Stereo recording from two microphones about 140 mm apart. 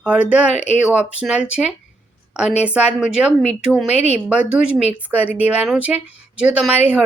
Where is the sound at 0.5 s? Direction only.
55° left (ahead or behind).